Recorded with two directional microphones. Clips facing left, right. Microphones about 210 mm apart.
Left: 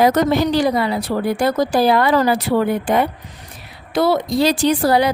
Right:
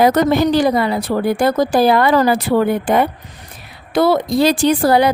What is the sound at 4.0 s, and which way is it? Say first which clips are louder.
A woman's voice: right 2 dB; 55° right (ahead or behind).